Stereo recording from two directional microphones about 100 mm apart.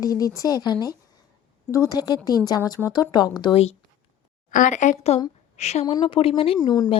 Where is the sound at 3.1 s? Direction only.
45° left (ahead or behind).